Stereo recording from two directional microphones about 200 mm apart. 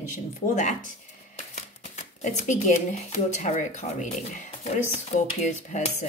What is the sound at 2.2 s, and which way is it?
Speech, 35° left (ahead or behind).